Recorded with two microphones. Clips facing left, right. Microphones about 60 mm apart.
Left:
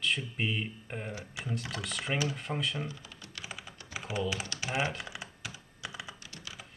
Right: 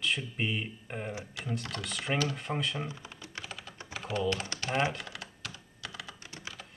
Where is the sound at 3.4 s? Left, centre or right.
Centre.